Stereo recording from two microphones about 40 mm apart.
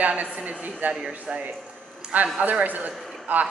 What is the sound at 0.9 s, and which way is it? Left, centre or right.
A woman's voice, right.